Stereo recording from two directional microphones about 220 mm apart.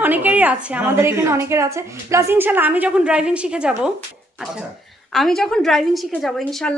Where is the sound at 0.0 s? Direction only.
5° right (ahead or behind).